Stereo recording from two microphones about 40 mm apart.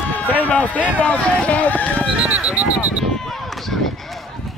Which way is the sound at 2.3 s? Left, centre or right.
Right.